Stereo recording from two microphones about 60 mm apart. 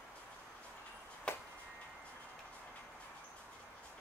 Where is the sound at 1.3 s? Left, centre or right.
Centre.